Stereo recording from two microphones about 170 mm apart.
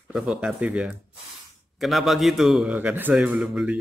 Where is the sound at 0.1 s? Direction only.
5° right (ahead or behind).